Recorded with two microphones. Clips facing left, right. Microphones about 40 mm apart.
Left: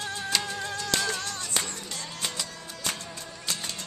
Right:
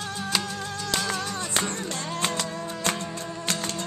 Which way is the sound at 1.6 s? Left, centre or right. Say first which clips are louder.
Right 7 dB; right.